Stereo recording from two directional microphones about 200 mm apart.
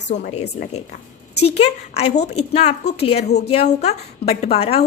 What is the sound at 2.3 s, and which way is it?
A woman's voice, 30° left (ahead or behind).